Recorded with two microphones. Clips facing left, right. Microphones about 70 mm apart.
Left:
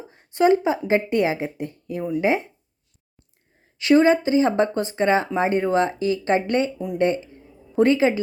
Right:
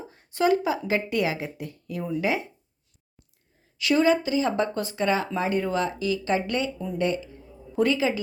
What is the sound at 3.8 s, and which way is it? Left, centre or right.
Speech, left.